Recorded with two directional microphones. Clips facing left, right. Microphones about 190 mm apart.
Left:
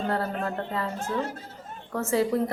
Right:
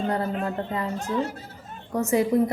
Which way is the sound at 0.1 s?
15° right (ahead or behind).